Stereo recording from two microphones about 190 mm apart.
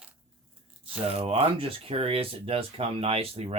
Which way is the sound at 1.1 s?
35° right (ahead or behind).